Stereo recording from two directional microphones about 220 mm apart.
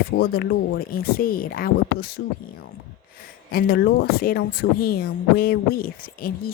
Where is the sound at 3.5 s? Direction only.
40° left (ahead or behind).